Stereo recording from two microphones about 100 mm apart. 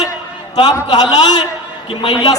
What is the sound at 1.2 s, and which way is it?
Speech, 45° left (ahead or behind).